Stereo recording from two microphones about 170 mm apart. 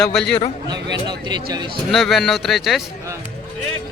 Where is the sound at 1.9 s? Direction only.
Centre (ahead or behind).